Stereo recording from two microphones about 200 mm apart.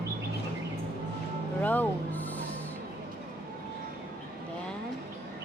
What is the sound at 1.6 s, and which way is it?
Music, 10° left (ahead or behind).